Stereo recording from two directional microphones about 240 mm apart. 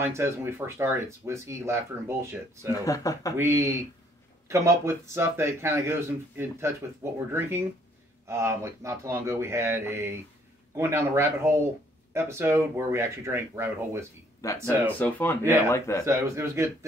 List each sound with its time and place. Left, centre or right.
0.0 s speech: centre
2.8 s speech: centre
3.3 s speech: centre
14.4 s speech: centre
16.1 s speech: centre